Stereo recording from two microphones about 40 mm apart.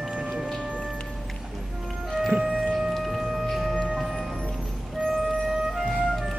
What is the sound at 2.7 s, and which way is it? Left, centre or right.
Music, centre.